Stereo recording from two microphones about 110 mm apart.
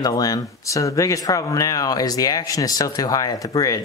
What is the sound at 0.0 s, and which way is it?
Speech, 35° left (ahead or behind).